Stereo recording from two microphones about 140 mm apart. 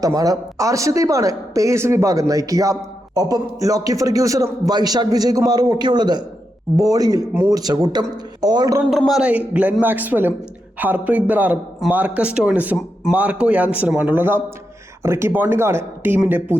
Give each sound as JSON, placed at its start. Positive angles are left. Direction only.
{"t": 0.0, "sound": "a man's voice", "side_deg": -25}
{"t": 8.9, "sound": "a man's voice", "side_deg": 0}